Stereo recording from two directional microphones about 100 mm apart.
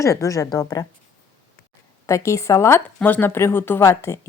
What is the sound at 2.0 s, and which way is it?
A woman's voice, 30° left (ahead or behind).